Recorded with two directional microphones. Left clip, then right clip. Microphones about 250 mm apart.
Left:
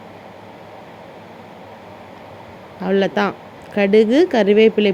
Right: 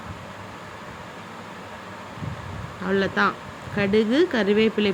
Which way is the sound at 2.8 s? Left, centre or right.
Centre.